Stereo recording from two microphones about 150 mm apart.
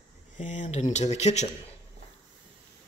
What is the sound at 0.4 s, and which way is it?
Speech, 55° left (ahead or behind).